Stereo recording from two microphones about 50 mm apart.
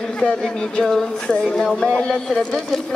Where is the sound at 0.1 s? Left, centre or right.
Centre.